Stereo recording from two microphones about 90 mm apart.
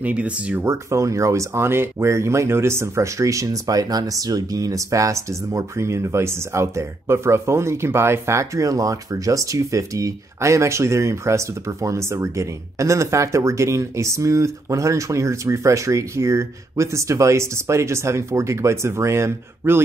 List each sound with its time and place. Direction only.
0.0 s speech: 15° right (ahead or behind)
0.7 s speech: 35° right (ahead or behind)